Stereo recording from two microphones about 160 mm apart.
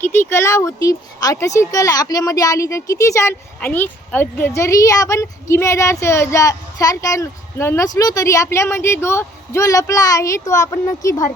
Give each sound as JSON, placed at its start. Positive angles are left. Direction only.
{"t": 0.0, "sound": "speech", "side_deg": 15}